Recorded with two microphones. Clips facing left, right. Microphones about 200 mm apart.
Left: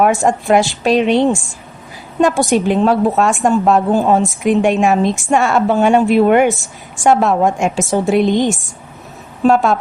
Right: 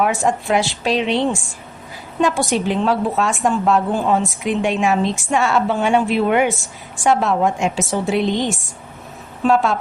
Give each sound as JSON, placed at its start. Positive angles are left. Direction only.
{"t": 0.0, "sound": "a woman's voice", "side_deg": 45}